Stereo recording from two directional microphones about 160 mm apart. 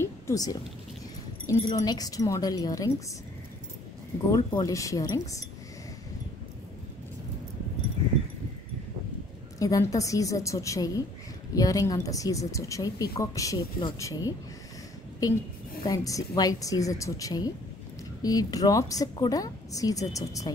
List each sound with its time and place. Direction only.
0.0 s a sound: 20° left (ahead or behind)
1.5 s a woman's voice: 20° left (ahead or behind)
4.3 s a woman's voice: 20° left (ahead or behind)
9.6 s a woman's voice: 20° left (ahead or behind)